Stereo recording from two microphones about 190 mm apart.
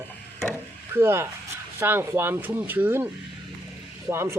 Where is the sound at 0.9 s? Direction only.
15° right (ahead or behind).